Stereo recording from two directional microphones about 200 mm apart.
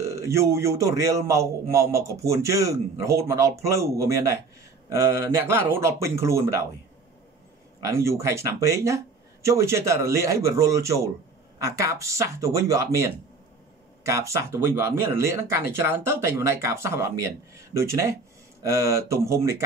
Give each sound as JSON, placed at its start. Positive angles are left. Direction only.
{"t": 0.0, "sound": "speech", "side_deg": -15}
{"t": 7.8, "sound": "speech", "side_deg": -15}